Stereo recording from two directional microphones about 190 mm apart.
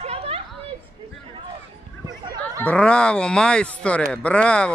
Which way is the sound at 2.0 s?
20° right (ahead or behind).